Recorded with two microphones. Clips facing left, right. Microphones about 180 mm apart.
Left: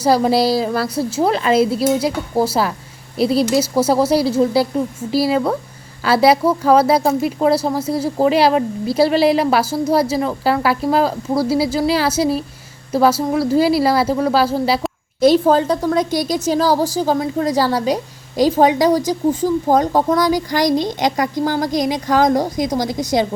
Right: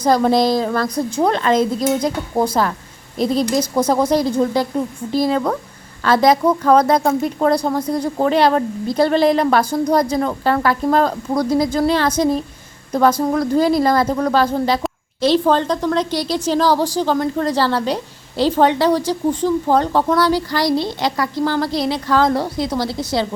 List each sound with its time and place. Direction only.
0.0 s speech: 10° left (ahead or behind)